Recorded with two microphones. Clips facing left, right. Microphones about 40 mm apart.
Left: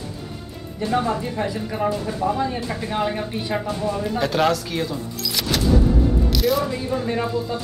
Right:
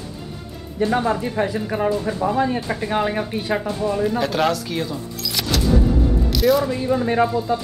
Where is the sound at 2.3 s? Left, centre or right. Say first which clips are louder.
Right 4 dB; right.